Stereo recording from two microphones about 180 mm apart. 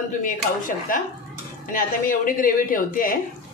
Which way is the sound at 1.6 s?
50° left (ahead or behind).